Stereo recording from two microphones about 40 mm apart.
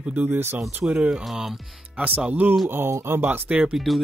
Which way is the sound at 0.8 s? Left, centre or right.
Right.